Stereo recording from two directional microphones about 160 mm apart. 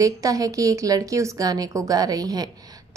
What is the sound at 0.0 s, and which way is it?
A woman's voice, 20° right (ahead or behind).